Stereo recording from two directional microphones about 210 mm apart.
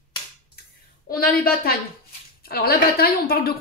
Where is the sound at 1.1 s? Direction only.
45° left (ahead or behind).